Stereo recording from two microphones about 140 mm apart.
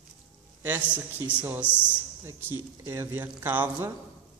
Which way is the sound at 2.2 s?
20° right (ahead or behind).